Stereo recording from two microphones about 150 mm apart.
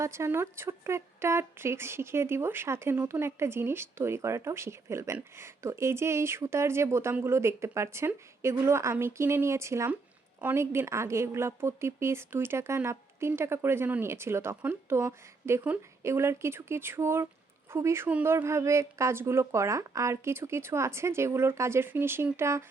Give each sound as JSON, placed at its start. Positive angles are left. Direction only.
{"t": 0.0, "sound": "a woman's voice", "side_deg": -20}